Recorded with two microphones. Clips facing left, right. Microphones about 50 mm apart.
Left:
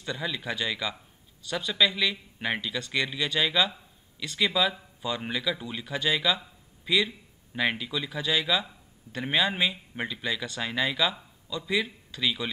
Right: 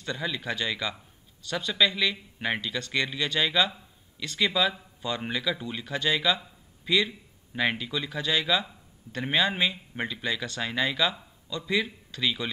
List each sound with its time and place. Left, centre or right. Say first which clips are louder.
0.0 s speech: right 1 dB; centre